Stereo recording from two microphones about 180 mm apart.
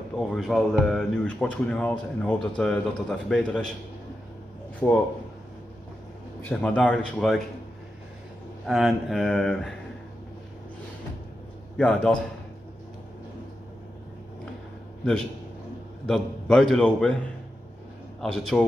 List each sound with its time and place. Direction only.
0.2 s speech: centre (ahead or behind)
4.8 s speech: 10° left (ahead or behind)
6.5 s speech: 5° left (ahead or behind)
8.6 s speech: centre (ahead or behind)
11.7 s speech: 5° left (ahead or behind)
16.1 s speech: centre (ahead or behind)
18.2 s speech: centre (ahead or behind)